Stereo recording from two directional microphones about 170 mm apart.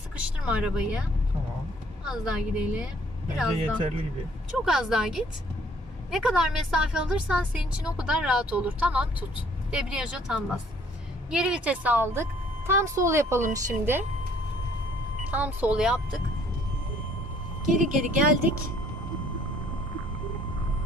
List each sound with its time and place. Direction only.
0.2 s speech: 5° right (ahead or behind)
2.0 s a woman's voice: centre (ahead or behind)
4.6 s a woman's voice: centre (ahead or behind)
15.3 s speech: 10° right (ahead or behind)
17.7 s speech: 50° right (ahead or behind)